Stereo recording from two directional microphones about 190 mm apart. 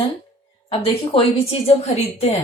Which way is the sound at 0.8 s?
30° left (ahead or behind).